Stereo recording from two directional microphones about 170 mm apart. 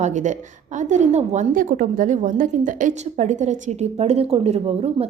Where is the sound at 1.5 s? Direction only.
55° right (ahead or behind).